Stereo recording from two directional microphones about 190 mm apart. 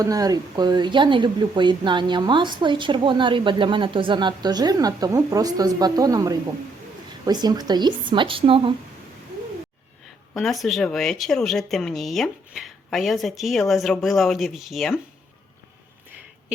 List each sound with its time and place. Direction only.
0.0 s speech: 20° right (ahead or behind)
10.3 s speech: centre (ahead or behind)